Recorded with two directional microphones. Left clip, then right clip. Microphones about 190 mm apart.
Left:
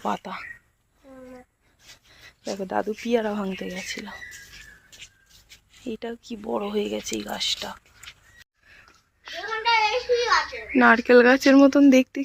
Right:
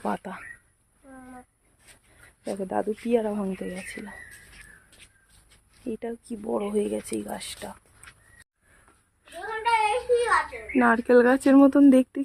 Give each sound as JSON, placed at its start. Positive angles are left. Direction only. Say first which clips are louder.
{"t": 0.0, "sound": "speech", "louder": "left 3 dB", "side_deg": -15}
{"t": 2.4, "sound": "speech", "louder": "left 1 dB", "side_deg": 0}
{"t": 5.8, "sound": "speech", "louder": "even", "side_deg": -5}
{"t": 9.6, "sound": "a sound", "louder": "left 1 dB", "side_deg": -40}
{"t": 10.8, "sound": "speech", "louder": "left 4 dB", "side_deg": 0}